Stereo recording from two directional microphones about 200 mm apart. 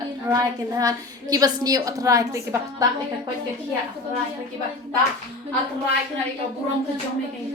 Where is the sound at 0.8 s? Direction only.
20° right (ahead or behind).